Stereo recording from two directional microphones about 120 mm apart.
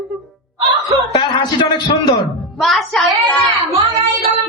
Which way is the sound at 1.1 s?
40° left (ahead or behind).